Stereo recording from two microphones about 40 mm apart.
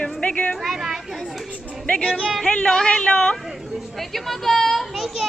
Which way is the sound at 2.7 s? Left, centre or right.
Centre.